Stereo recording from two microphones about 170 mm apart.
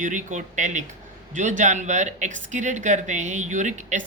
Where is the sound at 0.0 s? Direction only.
45° right (ahead or behind).